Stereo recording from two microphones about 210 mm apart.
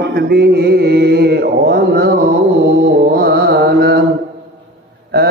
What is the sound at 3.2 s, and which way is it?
Mantra, 50° right (ahead or behind).